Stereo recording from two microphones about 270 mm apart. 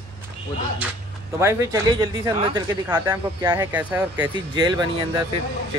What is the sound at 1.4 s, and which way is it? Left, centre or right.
Speech, centre.